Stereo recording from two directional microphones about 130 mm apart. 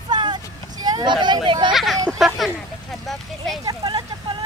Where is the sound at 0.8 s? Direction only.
35° right (ahead or behind).